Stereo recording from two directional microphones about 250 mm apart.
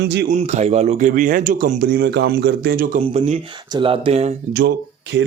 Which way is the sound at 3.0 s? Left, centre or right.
Right.